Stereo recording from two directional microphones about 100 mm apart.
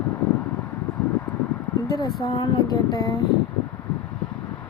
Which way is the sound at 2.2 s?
45° left (ahead or behind).